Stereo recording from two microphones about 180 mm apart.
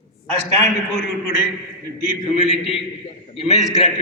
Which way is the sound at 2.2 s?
35° left (ahead or behind).